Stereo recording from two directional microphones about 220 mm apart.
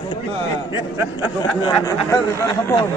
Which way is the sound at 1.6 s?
20° left (ahead or behind).